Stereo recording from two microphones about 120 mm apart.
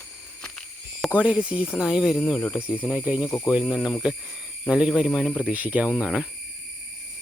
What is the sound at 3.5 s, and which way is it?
Speech, 5° right (ahead or behind).